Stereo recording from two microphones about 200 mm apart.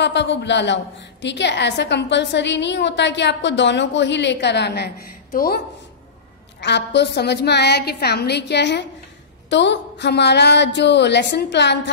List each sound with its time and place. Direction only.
0.0 s a woman's voice: 60° left (ahead or behind)
6.6 s a woman's voice: 60° left (ahead or behind)